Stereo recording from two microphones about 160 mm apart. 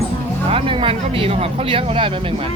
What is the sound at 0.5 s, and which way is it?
Speech, 35° right (ahead or behind).